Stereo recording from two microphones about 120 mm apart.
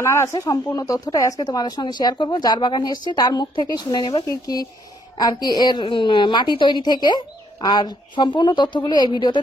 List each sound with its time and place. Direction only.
0.0 s a woman's voice: 25° left (ahead or behind); by 9.4 s 40° left (ahead or behind)